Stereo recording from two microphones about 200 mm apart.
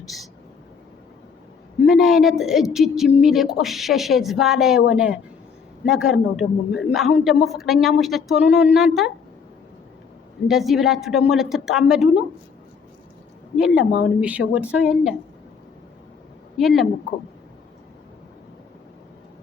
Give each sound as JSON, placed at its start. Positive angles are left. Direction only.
{"t": 0.0, "sound": "speech", "side_deg": 0}
{"t": 1.8, "sound": "a man's voice", "side_deg": 0}
{"t": 10.5, "sound": "a man's voice", "side_deg": 0}
{"t": 13.6, "sound": "a man's voice", "side_deg": -5}
{"t": 16.6, "sound": "a man's voice", "side_deg": 0}